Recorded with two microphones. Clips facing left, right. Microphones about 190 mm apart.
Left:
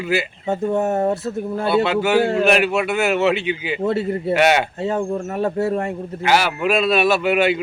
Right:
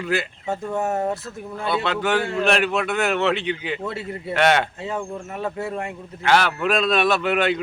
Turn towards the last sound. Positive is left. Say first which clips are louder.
# left 3 dB
turn(degrees=5)  # may be behind; listen again after turning